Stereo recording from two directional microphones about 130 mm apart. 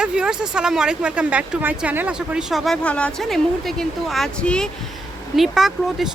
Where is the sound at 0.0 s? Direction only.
5° right (ahead or behind).